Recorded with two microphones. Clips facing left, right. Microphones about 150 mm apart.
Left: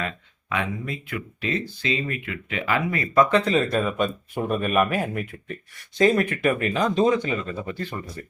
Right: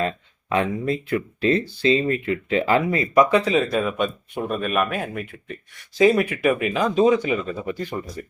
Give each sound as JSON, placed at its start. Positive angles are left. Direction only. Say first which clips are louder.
{"t": 0.5, "sound": "speech", "louder": "right 6 dB", "side_deg": -35}
{"t": 3.2, "sound": "speech", "louder": "right 2 dB", "side_deg": -10}